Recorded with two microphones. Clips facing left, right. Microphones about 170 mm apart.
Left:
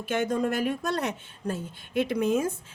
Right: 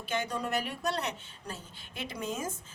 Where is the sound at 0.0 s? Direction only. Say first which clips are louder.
Left 7 dB; 50° left (ahead or behind).